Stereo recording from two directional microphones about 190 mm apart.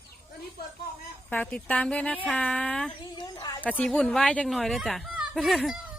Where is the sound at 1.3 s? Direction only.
5° left (ahead or behind).